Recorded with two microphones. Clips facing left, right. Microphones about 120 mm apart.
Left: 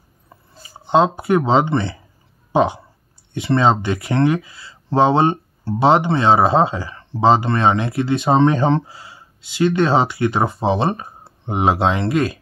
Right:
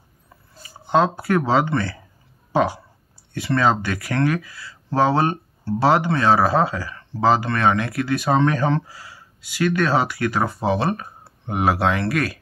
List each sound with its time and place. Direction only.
0.8 s speech: 20° left (ahead or behind)